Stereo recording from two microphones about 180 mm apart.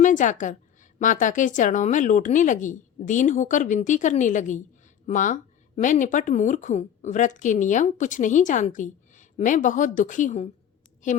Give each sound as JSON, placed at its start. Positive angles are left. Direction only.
{"t": 0.0, "sound": "a woman's voice", "side_deg": 45}